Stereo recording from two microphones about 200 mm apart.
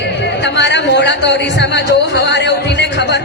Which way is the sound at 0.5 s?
60° left (ahead or behind).